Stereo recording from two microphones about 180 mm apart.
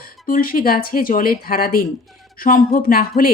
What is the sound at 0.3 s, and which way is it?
Speech, 50° left (ahead or behind).